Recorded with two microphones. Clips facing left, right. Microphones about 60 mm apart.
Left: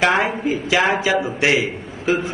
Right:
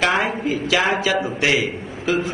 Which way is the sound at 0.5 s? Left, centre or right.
Left.